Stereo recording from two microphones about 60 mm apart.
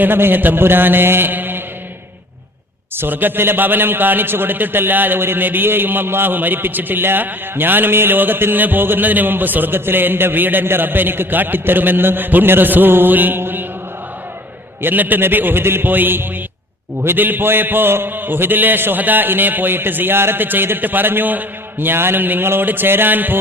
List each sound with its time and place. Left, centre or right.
0.0 s a man's voice: right
2.9 s a man's voice: right
14.8 s a man's voice: right